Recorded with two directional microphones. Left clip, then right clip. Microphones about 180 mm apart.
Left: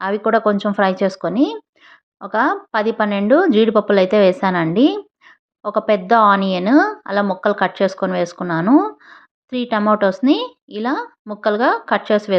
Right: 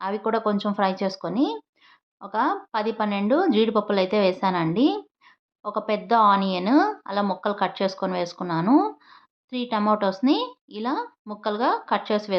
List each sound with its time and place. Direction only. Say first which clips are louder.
0.0 s a woman's voice: left 8 dB; 25° left (ahead or behind)